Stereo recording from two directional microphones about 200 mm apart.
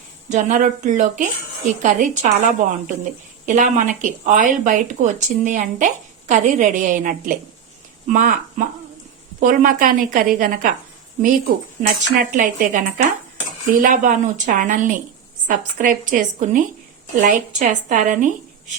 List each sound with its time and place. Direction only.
0.3 s a woman's voice: 35° right (ahead or behind)
11.8 s a woman's voice: 40° right (ahead or behind)